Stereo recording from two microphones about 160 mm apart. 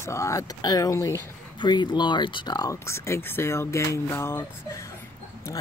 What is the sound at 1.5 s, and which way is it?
Speech, 30° left (ahead or behind).